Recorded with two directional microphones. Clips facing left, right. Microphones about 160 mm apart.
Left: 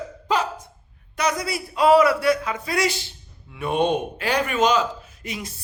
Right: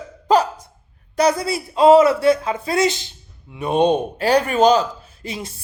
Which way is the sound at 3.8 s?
35° right (ahead or behind).